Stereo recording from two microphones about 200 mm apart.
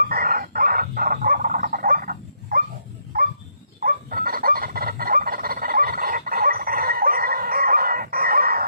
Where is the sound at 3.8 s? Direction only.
45° right (ahead or behind).